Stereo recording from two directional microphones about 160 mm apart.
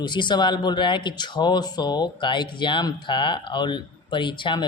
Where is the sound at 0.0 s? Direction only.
30° left (ahead or behind).